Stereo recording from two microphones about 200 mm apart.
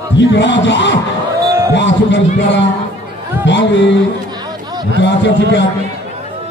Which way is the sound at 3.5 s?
65° left (ahead or behind).